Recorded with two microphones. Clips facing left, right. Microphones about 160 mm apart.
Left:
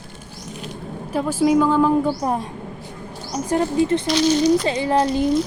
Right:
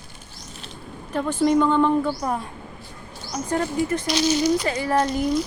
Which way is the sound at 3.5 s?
25° left (ahead or behind).